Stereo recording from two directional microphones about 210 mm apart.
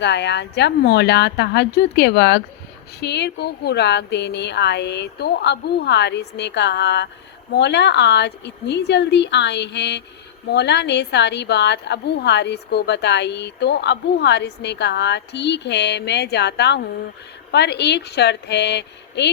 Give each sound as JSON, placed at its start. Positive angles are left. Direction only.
{"t": 0.0, "sound": "a woman's voice", "side_deg": 55}